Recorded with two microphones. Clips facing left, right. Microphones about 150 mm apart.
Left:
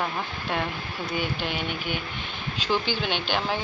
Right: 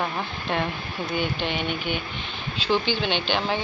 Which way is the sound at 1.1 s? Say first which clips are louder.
Right 2 dB; 10° left (ahead or behind).